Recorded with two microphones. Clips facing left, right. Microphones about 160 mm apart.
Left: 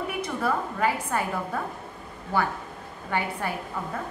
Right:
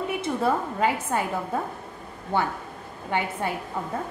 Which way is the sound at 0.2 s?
25° right (ahead or behind).